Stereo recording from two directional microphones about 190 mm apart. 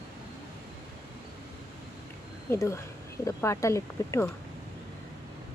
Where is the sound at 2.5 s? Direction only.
15° left (ahead or behind).